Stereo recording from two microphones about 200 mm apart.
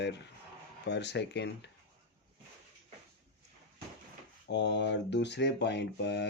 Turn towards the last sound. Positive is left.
turn(degrees=60)  # may be behind; listen again after turning